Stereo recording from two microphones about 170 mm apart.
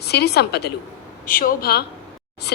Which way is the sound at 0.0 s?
70° left (ahead or behind).